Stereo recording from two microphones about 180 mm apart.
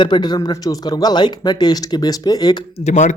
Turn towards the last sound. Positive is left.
turn(degrees=40)  # may be behind; listen again after turning